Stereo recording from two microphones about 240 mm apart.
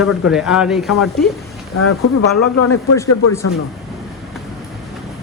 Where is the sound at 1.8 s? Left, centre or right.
Left.